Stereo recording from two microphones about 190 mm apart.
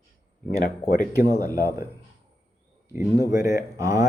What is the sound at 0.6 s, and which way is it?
Speech, 50° left (ahead or behind).